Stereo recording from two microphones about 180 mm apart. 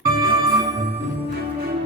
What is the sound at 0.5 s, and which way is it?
Music, 20° right (ahead or behind).